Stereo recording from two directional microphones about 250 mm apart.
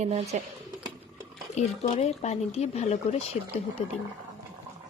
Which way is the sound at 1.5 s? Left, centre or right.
Left.